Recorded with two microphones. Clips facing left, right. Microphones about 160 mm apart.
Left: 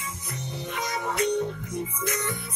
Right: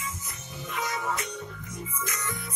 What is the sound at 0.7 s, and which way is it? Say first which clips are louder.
Music: left 2 dB; 70° left (ahead or behind).